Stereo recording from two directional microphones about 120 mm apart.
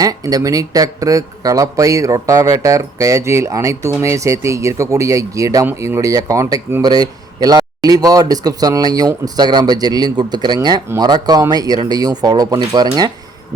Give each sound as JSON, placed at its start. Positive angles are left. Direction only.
{"t": 0.0, "sound": "speech", "side_deg": -30}
{"t": 6.8, "sound": "a man's voice", "side_deg": -35}